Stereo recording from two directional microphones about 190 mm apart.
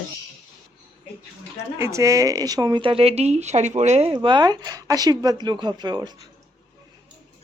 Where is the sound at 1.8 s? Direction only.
15° right (ahead or behind); by 4.1 s 35° right (ahead or behind).